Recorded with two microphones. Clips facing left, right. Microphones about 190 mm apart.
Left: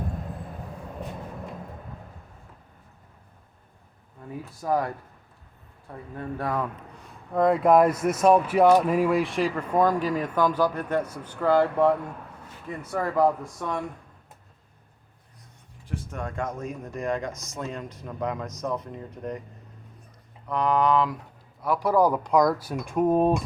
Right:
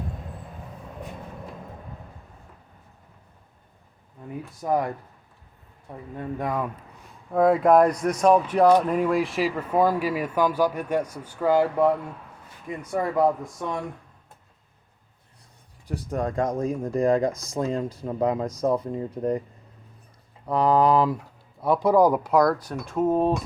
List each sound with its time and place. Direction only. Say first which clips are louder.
4.6 s speech: right 1 dB; 20° right (ahead or behind)
6.1 s speech: right 1 dB; 15° right (ahead or behind)
7.3 s speech: right 1 dB; centre (ahead or behind); by 13.7 s 20° right (ahead or behind)
15.9 s speech: right 6 dB; 35° right (ahead or behind)
20.5 s speech: right 3 dB; 35° right (ahead or behind)
21.6 s speech: right 3 dB; 20° right (ahead or behind); by 23.4 s 15° left (ahead or behind)